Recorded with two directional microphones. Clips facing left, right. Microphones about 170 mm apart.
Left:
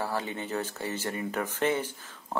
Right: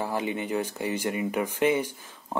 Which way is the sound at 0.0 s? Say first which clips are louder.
Right 3 dB; 15° right (ahead or behind).